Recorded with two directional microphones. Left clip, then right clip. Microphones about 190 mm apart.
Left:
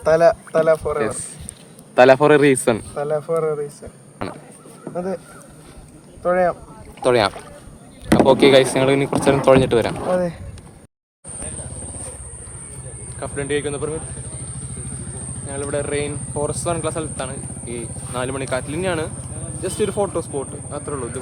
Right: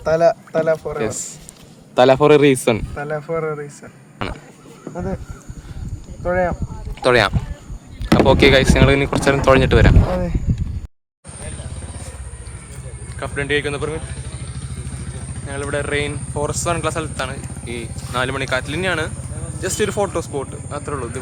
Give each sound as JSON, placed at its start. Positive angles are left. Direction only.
{"t": 0.0, "sound": "speech", "side_deg": 5}
{"t": 0.9, "sound": "speech", "side_deg": -15}
{"t": 2.9, "sound": "speech", "side_deg": 10}
{"t": 6.2, "sound": "speech", "side_deg": 5}
{"t": 13.1, "sound": "speech", "side_deg": -10}
{"t": 15.4, "sound": "speech", "side_deg": -5}